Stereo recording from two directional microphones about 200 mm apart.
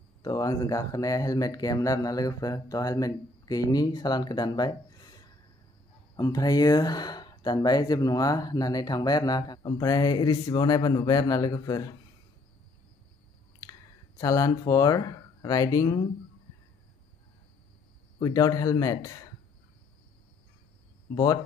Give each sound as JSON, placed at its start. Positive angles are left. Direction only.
{"t": 0.2, "sound": "speech", "side_deg": 20}
{"t": 13.6, "sound": "speech", "side_deg": 15}
{"t": 18.2, "sound": "a man's voice", "side_deg": 15}
{"t": 21.1, "sound": "speech", "side_deg": 20}